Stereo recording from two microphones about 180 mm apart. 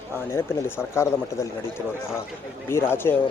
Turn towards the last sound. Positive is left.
turn(degrees=10)  # may be behind; listen again after turning